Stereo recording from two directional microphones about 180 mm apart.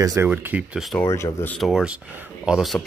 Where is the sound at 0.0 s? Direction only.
20° right (ahead or behind).